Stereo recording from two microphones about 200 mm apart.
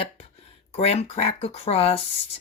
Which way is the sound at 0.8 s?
30° left (ahead or behind).